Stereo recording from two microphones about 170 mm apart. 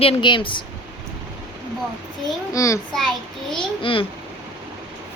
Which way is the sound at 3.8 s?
30° left (ahead or behind).